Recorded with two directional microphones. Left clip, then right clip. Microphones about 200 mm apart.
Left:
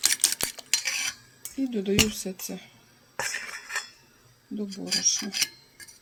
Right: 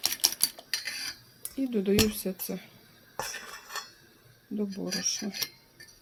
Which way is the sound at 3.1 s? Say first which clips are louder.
Left 5 dB; 30° right (ahead or behind).